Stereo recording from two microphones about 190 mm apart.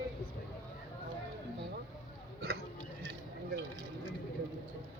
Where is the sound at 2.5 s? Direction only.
60° right (ahead or behind).